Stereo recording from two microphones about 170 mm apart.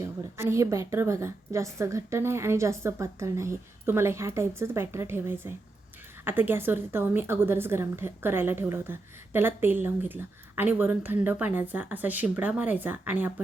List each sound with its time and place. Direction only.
0.0 s a woman's voice: 15° right (ahead or behind)